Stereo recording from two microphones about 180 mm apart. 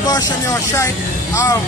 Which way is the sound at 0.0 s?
20° left (ahead or behind).